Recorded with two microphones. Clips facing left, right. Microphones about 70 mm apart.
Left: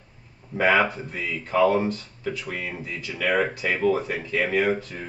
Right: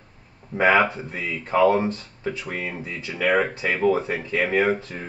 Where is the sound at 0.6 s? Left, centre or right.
Right.